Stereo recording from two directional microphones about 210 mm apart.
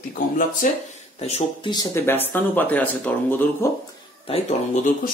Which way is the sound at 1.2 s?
30° left (ahead or behind).